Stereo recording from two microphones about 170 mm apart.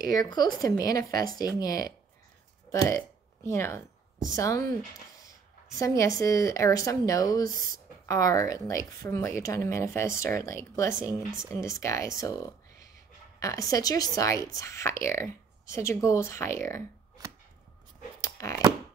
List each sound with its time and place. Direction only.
0.1 s a woman's voice: 25° left (ahead or behind)
3.4 s a woman's voice: 15° left (ahead or behind)
5.8 s a woman's voice: 20° left (ahead or behind)
18.2 s a sound: 20° left (ahead or behind)